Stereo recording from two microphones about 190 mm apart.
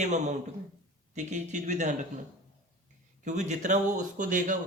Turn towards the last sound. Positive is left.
turn(degrees=-40)  # may be behind; listen again after turning